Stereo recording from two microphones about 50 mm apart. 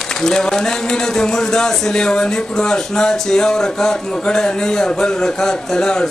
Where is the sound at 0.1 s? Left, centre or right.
Centre.